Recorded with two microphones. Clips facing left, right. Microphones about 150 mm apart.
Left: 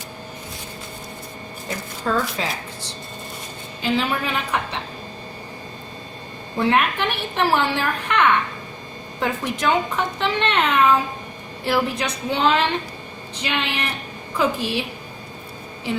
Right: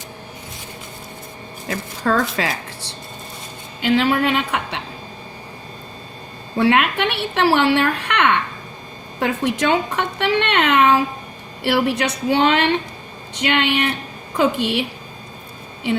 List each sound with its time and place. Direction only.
1.6 s speech: 70° right (ahead or behind)
3.8 s speech: 75° right (ahead or behind)
6.6 s speech: 75° right (ahead or behind)
9.2 s speech: 70° right (ahead or behind)